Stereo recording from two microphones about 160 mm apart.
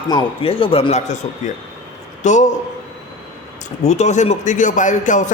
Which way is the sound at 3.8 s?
45° left (ahead or behind).